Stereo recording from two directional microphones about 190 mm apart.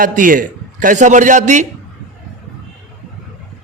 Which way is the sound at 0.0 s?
45° right (ahead or behind).